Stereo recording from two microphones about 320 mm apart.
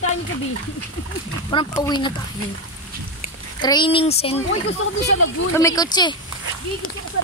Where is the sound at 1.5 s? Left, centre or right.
Centre.